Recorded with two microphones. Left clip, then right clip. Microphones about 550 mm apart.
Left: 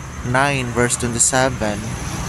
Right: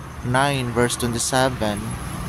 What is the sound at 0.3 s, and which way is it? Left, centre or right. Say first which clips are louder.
Speech: left 3 dB; right.